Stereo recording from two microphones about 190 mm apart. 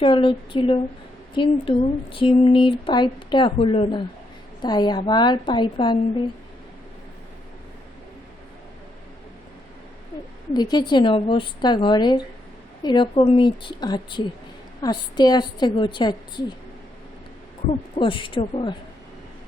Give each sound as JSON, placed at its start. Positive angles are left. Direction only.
{"t": 0.0, "sound": "speech", "side_deg": 25}
{"t": 10.5, "sound": "speech", "side_deg": 20}
{"t": 17.9, "sound": "speech", "side_deg": 25}